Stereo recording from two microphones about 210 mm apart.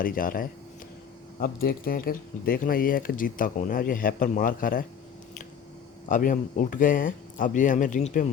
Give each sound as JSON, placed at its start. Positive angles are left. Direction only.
{"t": 0.0, "sound": "speech", "side_deg": 40}
{"t": 6.1, "sound": "speech", "side_deg": 40}